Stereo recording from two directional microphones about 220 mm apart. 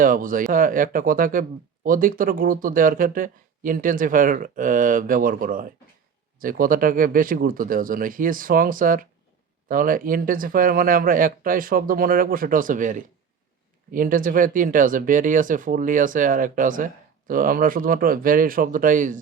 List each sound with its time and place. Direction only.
0.0 s speech: 40° right (ahead or behind)